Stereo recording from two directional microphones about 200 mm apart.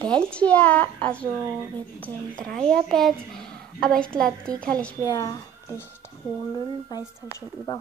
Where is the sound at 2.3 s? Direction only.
40° right (ahead or behind).